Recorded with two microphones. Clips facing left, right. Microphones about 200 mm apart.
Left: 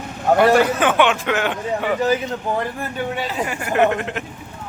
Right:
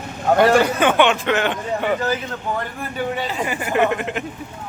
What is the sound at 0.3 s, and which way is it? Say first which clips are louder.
A man's voice: even; 5° left (ahead or behind).